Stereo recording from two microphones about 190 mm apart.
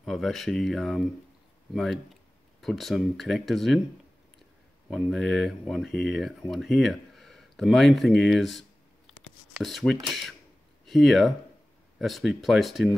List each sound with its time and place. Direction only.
0.0 s speech: centre (ahead or behind)
4.8 s speech: centre (ahead or behind)